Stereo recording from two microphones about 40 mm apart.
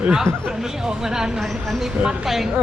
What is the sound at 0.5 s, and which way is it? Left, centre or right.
Speech, centre.